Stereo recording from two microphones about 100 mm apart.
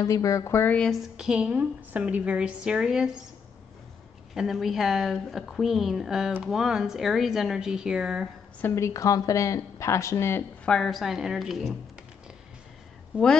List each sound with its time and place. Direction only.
0.0 s speech: 35° left (ahead or behind)
1.1 s a woman's voice: 5° right (ahead or behind)
4.3 s a woman's voice: centre (ahead or behind)
8.5 s speech: 25° left (ahead or behind)
10.6 s a woman's voice: 5° left (ahead or behind)